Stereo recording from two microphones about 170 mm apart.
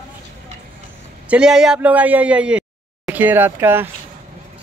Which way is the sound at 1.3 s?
5° right (ahead or behind).